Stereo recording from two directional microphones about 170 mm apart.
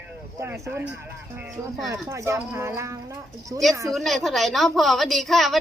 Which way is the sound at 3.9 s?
Centre (ahead or behind).